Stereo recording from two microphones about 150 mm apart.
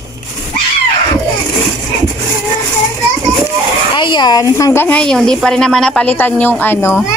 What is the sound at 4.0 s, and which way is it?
A woman's voice, 30° left (ahead or behind).